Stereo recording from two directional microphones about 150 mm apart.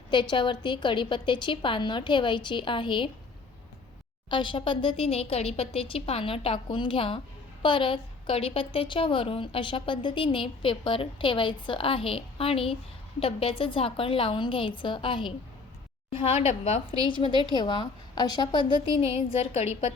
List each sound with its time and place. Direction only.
0.1 s a woman's voice: 30° left (ahead or behind)
4.3 s a woman's voice: 35° left (ahead or behind)
17.1 s a woman's voice: 30° left (ahead or behind)